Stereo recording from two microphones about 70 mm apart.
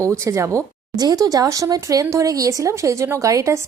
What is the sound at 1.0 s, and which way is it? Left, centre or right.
Speech, right.